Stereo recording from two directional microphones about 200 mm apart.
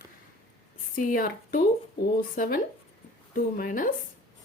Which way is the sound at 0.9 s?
45° left (ahead or behind).